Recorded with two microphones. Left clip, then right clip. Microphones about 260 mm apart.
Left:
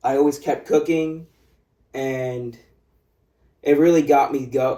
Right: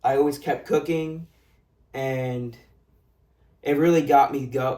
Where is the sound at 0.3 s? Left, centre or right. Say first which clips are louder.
Left 4 dB; centre.